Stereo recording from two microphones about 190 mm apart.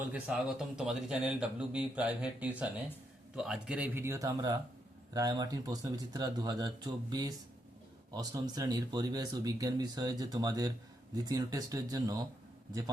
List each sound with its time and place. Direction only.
0.0 s speech: 10° right (ahead or behind)